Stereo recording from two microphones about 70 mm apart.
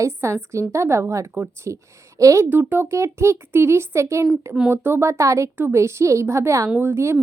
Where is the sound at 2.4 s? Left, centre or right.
Right.